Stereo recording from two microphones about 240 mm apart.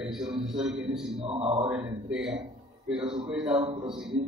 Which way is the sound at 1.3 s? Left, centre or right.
Right.